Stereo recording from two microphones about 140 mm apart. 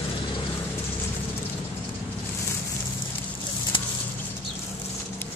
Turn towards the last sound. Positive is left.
turn(degrees=35)  # may be behind; listen again after turning